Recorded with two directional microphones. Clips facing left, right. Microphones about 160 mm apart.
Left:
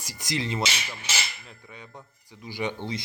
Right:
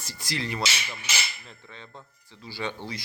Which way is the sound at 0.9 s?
5° left (ahead or behind).